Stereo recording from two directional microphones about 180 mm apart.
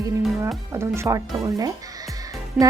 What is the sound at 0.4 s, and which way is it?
Speech, 15° right (ahead or behind).